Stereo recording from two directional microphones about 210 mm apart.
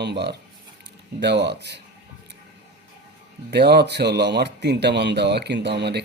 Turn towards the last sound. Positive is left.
turn(degrees=-50)  # may be behind; listen again after turning